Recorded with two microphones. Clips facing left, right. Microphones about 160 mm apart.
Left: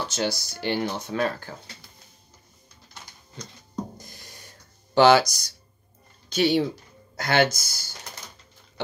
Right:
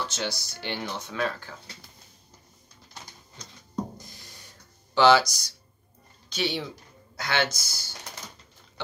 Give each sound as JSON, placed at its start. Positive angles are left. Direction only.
{"t": 0.0, "sound": "speech", "side_deg": 40}
{"t": 4.9, "sound": "speech", "side_deg": 45}